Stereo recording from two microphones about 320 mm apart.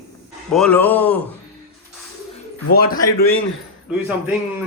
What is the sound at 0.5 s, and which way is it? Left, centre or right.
Speech, centre.